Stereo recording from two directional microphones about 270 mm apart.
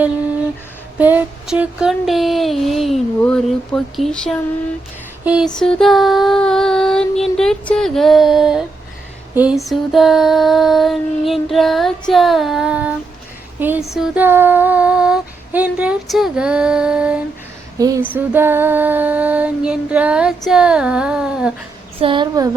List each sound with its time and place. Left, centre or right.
0.9 s female singing: centre
5.2 s a sound: centre
5.5 s female singing: centre
17.7 s speech: centre
18.1 s female singing: centre
22.0 s speech: centre